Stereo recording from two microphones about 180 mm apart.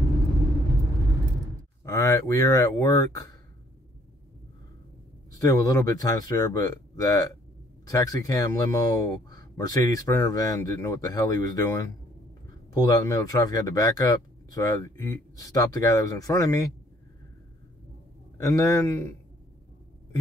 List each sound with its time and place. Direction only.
1.9 s speech: 20° left (ahead or behind)
5.4 s speech: 20° left (ahead or behind)
18.4 s a man's voice: 20° left (ahead or behind)